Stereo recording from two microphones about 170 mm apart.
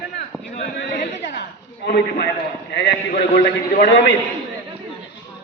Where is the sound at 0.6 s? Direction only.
65° left (ahead or behind).